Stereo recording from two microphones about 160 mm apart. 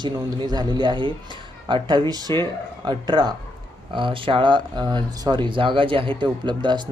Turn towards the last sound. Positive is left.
turn(degrees=-30)  # may be behind; listen again after turning